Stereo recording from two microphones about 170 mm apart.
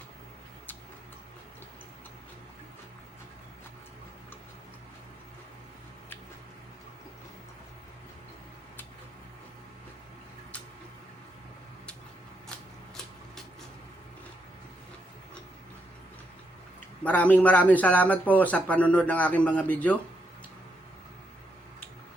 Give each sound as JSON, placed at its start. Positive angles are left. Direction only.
{"t": 17.0, "sound": "speech", "side_deg": 10}